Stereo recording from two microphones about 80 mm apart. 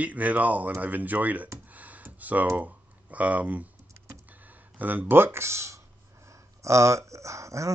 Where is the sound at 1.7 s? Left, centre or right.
Centre.